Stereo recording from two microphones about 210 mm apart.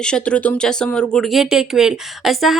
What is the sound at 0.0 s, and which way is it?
Speech, 5° left (ahead or behind).